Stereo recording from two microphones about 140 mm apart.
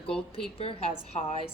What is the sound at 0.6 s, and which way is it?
Speech, 45° left (ahead or behind).